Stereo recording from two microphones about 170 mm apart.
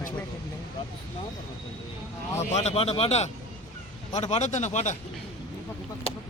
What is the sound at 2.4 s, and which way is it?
A man's voice, 40° left (ahead or behind).